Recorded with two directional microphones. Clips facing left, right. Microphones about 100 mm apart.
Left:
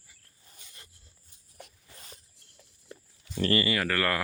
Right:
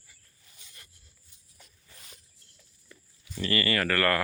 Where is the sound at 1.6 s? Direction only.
65° left (ahead or behind).